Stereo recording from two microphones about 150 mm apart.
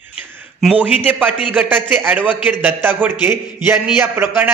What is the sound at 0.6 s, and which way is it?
A man's voice, 10° right (ahead or behind).